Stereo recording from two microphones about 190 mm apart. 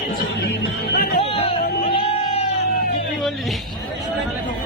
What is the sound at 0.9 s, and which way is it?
Speech, 55° left (ahead or behind).